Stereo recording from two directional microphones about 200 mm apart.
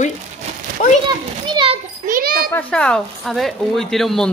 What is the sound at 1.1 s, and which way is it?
Speech, 20° right (ahead or behind).